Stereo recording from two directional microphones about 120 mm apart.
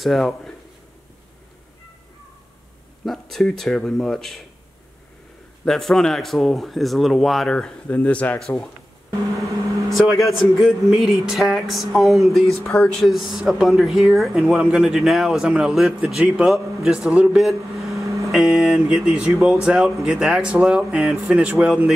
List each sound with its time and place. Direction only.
0.0 s speech: centre (ahead or behind)
3.1 s speech: centre (ahead or behind)
5.7 s speech: 5° left (ahead or behind)
9.8 s speech: centre (ahead or behind)
17.9 s vehicle: 25° right (ahead or behind)
18.2 s speech: centre (ahead or behind)